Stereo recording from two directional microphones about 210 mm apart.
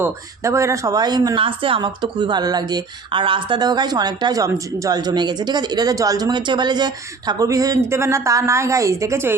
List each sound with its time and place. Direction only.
0.0 s a woman's voice: 15° right (ahead or behind)